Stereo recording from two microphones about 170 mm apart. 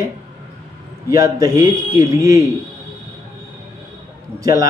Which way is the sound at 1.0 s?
20° right (ahead or behind).